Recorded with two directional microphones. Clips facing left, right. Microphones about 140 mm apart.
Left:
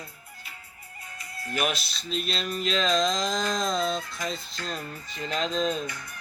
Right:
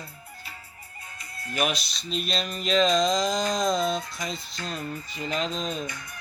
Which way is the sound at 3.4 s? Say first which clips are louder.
Right 2 dB; 45° right (ahead or behind).